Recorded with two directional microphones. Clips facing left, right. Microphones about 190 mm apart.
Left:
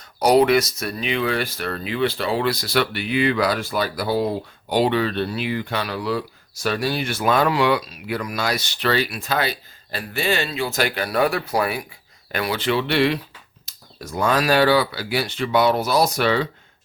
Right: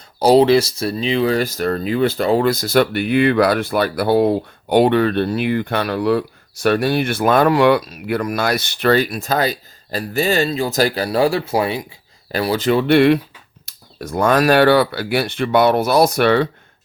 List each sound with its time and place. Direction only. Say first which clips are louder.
0.0 s speech: right 4 dB; 30° right (ahead or behind); by 16.5 s 60° right (ahead or behind)